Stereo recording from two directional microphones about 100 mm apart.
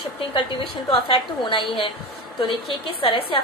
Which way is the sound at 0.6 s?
70° left (ahead or behind).